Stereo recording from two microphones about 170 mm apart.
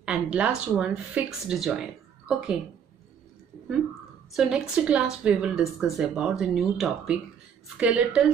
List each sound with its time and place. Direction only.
0.0 s speech: 5° right (ahead or behind)
4.4 s a woman's voice: 5° right (ahead or behind)